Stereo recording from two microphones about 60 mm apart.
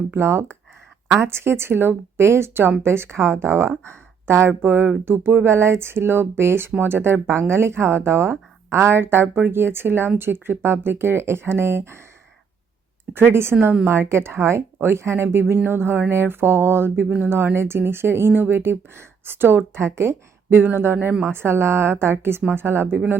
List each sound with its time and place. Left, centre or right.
0.1 s speech: right
13.3 s speech: right
20.5 s speech: right